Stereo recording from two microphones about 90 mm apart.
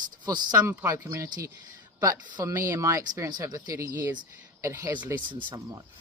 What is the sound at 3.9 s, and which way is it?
Speech, 20° right (ahead or behind).